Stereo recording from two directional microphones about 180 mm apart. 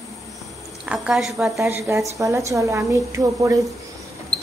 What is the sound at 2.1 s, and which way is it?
A woman's voice, 15° right (ahead or behind).